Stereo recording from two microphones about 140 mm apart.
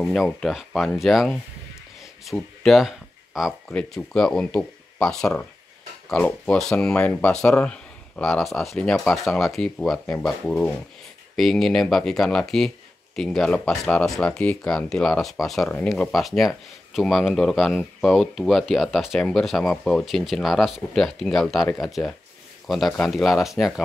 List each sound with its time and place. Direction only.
0.0 s speech: centre (ahead or behind)